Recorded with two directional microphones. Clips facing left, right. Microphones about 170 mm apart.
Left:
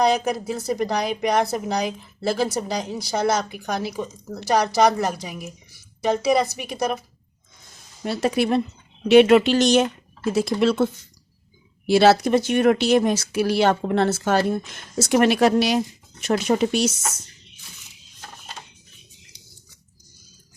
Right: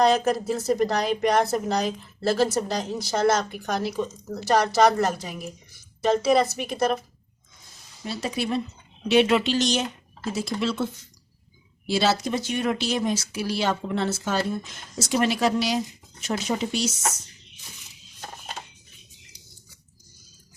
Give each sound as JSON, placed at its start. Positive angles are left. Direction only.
{"t": 0.0, "sound": "speech", "side_deg": 10}
{"t": 0.4, "sound": "speech", "side_deg": 0}
{"t": 2.3, "sound": "speech", "side_deg": 0}
{"t": 2.6, "sound": "speech", "side_deg": 10}
{"t": 2.8, "sound": "speech", "side_deg": 0}
{"t": 3.1, "sound": "speech", "side_deg": 10}
{"t": 8.0, "sound": "speech", "side_deg": 60}
{"t": 11.9, "sound": "speech", "side_deg": 60}